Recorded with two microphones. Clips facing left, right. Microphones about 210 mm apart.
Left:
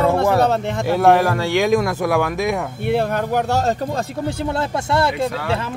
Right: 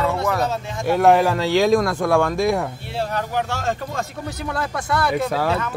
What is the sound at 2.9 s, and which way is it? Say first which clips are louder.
Speech: left 7 dB; 55° left (ahead or behind).